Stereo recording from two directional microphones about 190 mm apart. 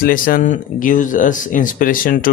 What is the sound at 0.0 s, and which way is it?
A man's voice, 45° left (ahead or behind).